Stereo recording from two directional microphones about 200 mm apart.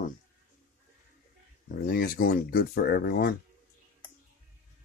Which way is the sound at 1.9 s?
50° left (ahead or behind).